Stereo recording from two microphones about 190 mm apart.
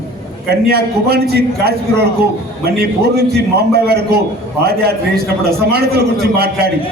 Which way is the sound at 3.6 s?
55° right (ahead or behind).